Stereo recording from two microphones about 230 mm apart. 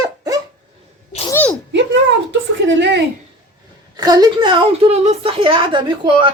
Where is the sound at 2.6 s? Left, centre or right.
Right.